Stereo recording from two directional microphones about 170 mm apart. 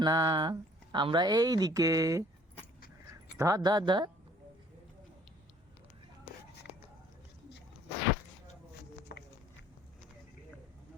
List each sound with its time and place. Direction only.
0.0 s speech: 25° right (ahead or behind)
3.3 s speech: 20° right (ahead or behind)
9.1 s a sound: 75° left (ahead or behind)